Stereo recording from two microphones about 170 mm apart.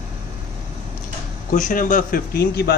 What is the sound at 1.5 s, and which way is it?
Speech, 50° left (ahead or behind).